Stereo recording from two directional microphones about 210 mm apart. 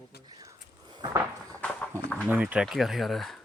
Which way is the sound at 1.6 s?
5° left (ahead or behind).